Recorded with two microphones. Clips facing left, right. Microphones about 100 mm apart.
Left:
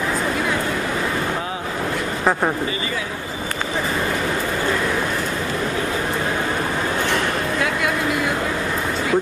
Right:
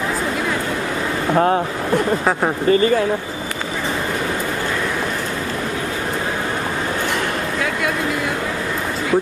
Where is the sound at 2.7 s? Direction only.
50° right (ahead or behind).